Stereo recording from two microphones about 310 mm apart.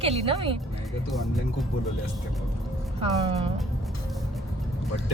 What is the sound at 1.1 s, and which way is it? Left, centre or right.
Speech, centre.